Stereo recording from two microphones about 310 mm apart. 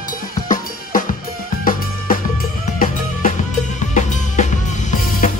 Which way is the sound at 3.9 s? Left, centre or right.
Left.